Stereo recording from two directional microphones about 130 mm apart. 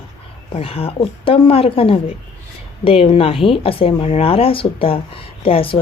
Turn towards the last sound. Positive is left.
turn(degrees=45)  # may be behind; listen again after turning